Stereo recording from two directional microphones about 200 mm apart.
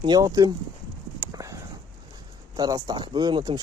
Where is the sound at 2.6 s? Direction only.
20° right (ahead or behind).